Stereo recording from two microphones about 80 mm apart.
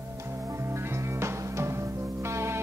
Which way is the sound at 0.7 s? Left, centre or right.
Right.